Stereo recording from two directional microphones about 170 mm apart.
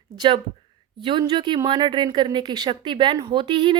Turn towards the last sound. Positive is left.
turn(degrees=-30)  # may be behind; listen again after turning